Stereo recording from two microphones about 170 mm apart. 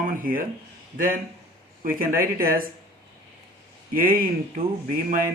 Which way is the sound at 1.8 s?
55° right (ahead or behind).